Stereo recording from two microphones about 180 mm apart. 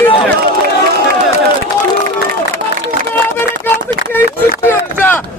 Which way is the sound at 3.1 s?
10° left (ahead or behind).